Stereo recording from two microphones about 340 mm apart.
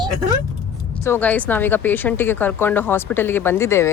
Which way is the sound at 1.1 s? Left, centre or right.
Centre.